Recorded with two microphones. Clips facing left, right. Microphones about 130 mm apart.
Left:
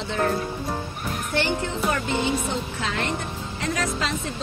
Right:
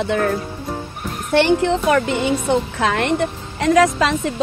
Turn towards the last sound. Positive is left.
turn(degrees=-85)